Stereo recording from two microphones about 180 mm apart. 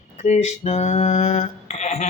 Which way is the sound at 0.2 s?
40° left (ahead or behind).